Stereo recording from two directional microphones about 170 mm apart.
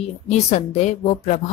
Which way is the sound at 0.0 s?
40° left (ahead or behind).